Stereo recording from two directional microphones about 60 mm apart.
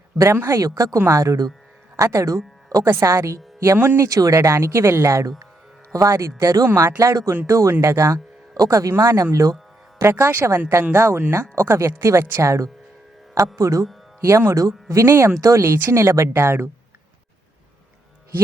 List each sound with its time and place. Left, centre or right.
0.5 s speech: right
0.9 s speech: right
2.6 s music: right
2.9 s speech: right
3.2 s speech: right
4.4 s speech: right
5.9 s speech: right
6.7 s speech: right
7.4 s speech: right
10.0 s speech: right